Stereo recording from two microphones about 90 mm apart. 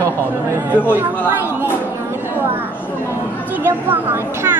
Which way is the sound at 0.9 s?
25° right (ahead or behind).